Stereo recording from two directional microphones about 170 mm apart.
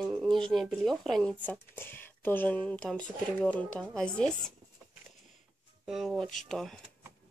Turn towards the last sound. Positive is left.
turn(degrees=0)  # may be behind; listen again after turning